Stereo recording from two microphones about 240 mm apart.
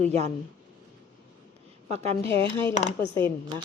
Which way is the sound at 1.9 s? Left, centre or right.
Right.